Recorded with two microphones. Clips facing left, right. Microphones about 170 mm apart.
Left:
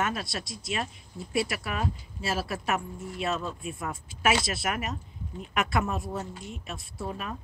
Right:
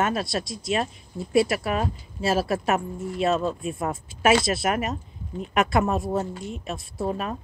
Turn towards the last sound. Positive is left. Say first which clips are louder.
# right 7 dB
turn(degrees=-35)  # may be behind; listen again after turning